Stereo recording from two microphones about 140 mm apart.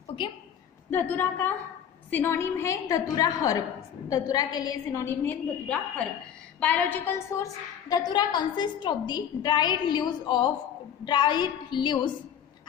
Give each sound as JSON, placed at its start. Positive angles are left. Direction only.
{"t": 0.8, "sound": "a woman's voice", "side_deg": 15}